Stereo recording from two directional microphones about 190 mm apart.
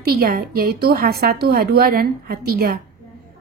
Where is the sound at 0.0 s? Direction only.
50° right (ahead or behind).